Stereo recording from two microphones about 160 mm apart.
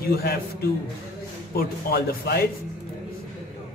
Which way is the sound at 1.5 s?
70° left (ahead or behind).